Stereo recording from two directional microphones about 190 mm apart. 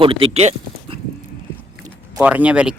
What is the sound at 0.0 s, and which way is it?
Speech, 30° right (ahead or behind).